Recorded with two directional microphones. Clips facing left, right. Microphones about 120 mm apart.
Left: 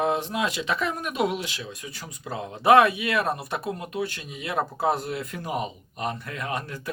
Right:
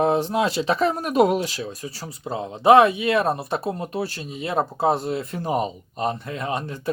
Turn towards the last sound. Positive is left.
turn(degrees=-25)  # may be behind; listen again after turning